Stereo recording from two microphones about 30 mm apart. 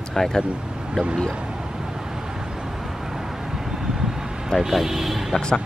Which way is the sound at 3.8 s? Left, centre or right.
Centre.